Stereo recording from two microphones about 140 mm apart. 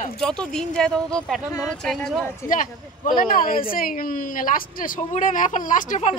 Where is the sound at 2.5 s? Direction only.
75° left (ahead or behind).